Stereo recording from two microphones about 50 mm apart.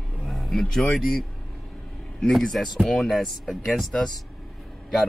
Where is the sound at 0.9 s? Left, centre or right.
Centre.